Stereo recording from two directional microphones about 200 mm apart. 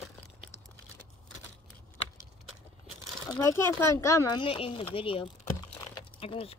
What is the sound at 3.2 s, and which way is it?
Speech, 15° left (ahead or behind).